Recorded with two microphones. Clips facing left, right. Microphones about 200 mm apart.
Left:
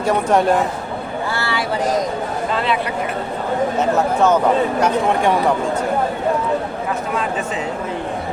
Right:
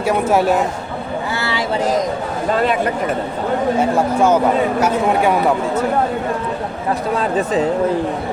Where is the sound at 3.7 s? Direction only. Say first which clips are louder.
Right 1 dB; 10° right (ahead or behind).